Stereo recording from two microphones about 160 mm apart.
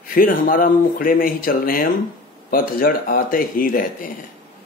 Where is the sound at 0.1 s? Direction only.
60° left (ahead or behind).